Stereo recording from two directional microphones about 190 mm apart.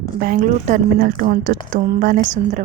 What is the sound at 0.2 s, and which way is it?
A woman's voice, 50° right (ahead or behind).